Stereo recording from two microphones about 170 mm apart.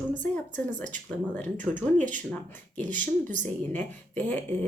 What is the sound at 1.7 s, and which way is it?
Speech, 10° right (ahead or behind).